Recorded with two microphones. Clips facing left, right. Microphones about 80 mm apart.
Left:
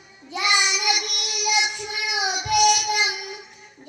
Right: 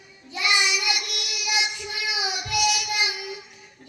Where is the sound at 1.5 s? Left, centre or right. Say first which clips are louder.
Left 3 dB; left.